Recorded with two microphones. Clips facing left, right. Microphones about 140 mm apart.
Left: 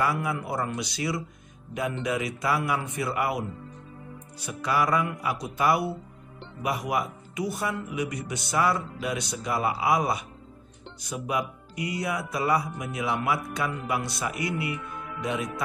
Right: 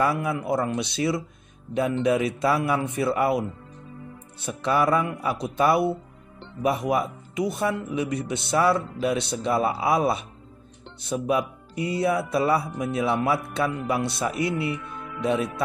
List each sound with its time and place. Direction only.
0.0 s speech: 25° right (ahead or behind)